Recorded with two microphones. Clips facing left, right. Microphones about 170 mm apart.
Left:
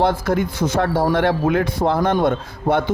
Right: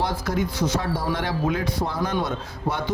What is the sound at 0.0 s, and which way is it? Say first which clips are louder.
Speech: left 7 dB; 55° left (ahead or behind).